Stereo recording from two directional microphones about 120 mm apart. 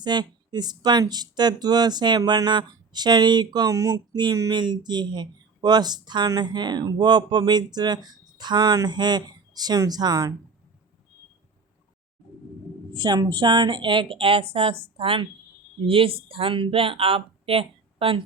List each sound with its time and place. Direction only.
0.0 s speech: 35° right (ahead or behind)
12.9 s a woman's voice: 40° right (ahead or behind)